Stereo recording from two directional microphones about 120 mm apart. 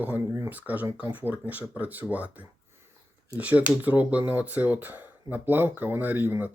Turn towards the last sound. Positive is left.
turn(degrees=-15)  # may be behind; listen again after turning